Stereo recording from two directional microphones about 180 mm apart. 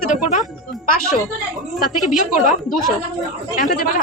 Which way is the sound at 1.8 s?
50° left (ahead or behind).